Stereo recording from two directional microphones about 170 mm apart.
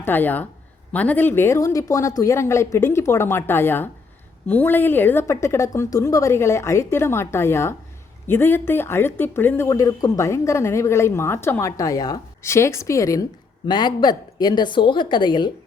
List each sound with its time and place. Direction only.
0.0 s a woman's voice: 10° left (ahead or behind); by 15.5 s 25° left (ahead or behind)